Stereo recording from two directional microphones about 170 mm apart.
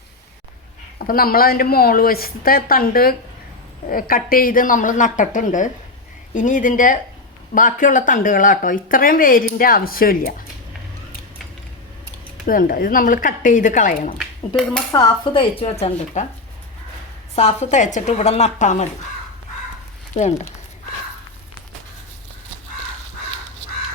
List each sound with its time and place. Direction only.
0.9 s speech: 60° left (ahead or behind)
12.5 s speech: 55° left (ahead or behind)
14.2 s speech: 5° left (ahead or behind)
14.9 s a woman's voice: 25° left (ahead or behind)
17.3 s a woman's voice: 40° left (ahead or behind)
20.1 s a woman's voice: 40° left (ahead or behind)